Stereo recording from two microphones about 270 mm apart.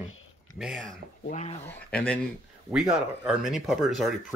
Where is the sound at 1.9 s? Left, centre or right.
Centre.